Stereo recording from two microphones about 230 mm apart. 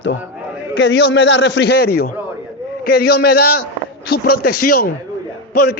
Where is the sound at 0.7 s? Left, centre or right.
Left.